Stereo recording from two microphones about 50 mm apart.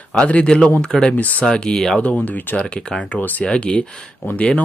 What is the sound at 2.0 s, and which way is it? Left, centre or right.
Speech, left.